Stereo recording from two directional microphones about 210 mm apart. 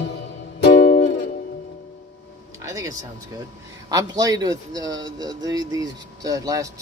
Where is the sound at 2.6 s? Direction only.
15° right (ahead or behind).